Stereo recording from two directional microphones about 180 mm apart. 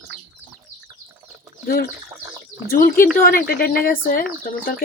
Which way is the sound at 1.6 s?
55° left (ahead or behind).